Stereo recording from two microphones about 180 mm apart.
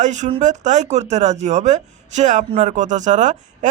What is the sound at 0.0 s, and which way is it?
A man's voice, 40° right (ahead or behind).